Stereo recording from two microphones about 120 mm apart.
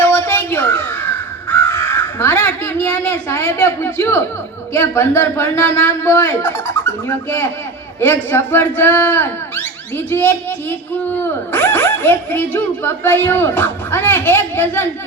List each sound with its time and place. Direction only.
0.0 s caw: 20° left (ahead or behind)
4.7 s a man's voice: 20° left (ahead or behind)